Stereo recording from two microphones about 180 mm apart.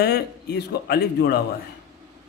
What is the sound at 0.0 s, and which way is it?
A man's voice, 60° left (ahead or behind).